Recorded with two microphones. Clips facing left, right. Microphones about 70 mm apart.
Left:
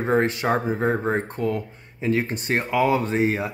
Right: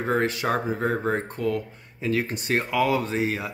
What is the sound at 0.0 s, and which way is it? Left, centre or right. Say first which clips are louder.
Speech: left 3 dB; left.